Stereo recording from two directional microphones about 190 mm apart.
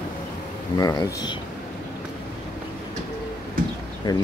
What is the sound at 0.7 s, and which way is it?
Speech, 20° left (ahead or behind).